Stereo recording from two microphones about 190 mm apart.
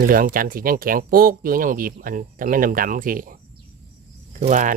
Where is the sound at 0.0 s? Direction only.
50° right (ahead or behind).